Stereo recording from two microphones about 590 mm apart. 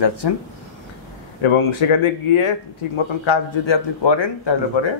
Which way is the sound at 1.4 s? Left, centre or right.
Left.